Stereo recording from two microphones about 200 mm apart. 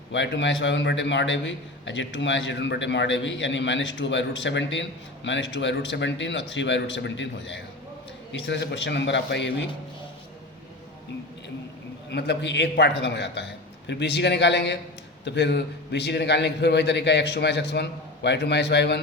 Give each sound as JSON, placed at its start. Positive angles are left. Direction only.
{"t": 0.1, "sound": "a man's voice", "side_deg": 65}
{"t": 12.1, "sound": "a man's voice", "side_deg": 60}